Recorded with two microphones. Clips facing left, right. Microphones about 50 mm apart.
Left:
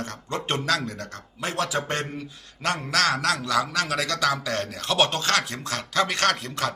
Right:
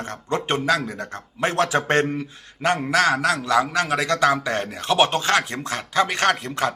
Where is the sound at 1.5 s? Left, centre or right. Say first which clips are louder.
Right 6 dB; right.